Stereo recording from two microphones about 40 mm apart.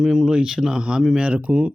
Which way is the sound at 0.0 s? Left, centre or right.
Centre.